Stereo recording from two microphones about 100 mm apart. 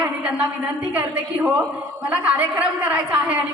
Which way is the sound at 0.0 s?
10° right (ahead or behind).